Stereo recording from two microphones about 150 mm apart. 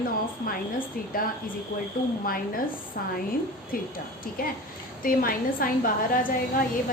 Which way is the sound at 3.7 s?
75° left (ahead or behind).